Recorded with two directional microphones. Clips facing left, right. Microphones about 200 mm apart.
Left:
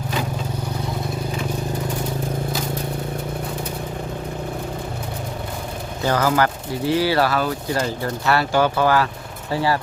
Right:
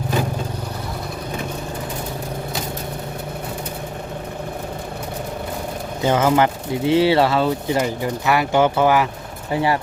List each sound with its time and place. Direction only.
6.0 s speech: 20° right (ahead or behind)